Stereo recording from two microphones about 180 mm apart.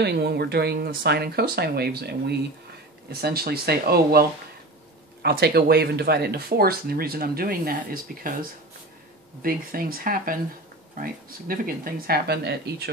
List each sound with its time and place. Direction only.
0.0 s speech: 65° right (ahead or behind)